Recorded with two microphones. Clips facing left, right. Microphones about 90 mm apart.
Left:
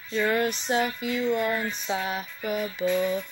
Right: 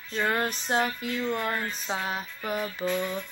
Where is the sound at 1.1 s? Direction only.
5° left (ahead or behind).